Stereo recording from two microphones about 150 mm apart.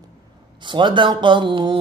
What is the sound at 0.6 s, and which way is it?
Speech, 30° right (ahead or behind).